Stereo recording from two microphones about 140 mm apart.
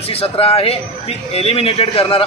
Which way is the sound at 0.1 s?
45° left (ahead or behind).